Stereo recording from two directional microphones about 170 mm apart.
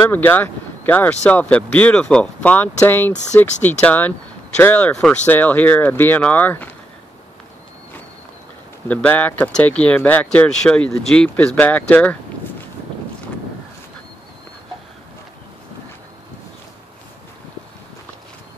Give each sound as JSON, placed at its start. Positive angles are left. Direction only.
{"t": 0.1, "sound": "speech", "side_deg": 10}
{"t": 8.8, "sound": "speech", "side_deg": 10}